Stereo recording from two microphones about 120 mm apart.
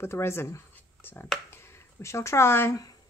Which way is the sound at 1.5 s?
20° left (ahead or behind).